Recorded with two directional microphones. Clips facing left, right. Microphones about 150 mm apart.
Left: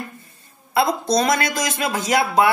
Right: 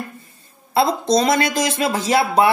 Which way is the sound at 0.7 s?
25° right (ahead or behind).